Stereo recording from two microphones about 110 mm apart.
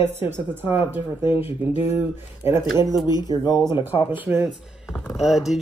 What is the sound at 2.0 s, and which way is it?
Speech, 20° right (ahead or behind).